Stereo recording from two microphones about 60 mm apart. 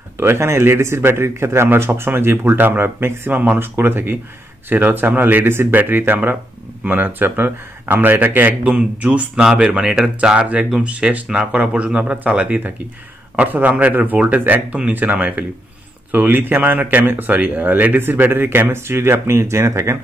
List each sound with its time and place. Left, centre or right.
0.2 s speech: right
8.6 s speech: right